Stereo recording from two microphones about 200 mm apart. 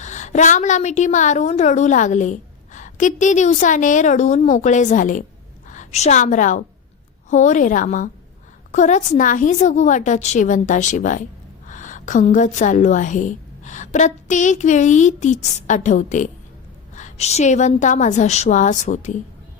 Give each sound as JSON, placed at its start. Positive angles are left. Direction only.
{"t": 0.0, "sound": "a woman's voice", "side_deg": 35}